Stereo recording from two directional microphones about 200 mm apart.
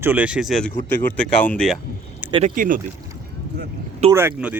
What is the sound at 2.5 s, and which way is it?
Speech, 45° right (ahead or behind).